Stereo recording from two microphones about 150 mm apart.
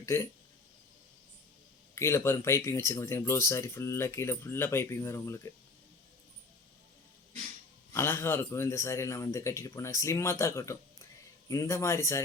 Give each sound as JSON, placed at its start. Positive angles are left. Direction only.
{"t": 0.0, "sound": "speech", "side_deg": 20}
{"t": 2.0, "sound": "speech", "side_deg": 15}
{"t": 7.9, "sound": "a man's voice", "side_deg": 15}